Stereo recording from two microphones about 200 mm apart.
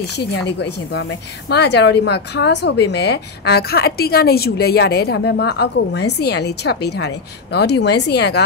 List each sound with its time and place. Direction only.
0.0 s a woman's voice: 60° left (ahead or behind)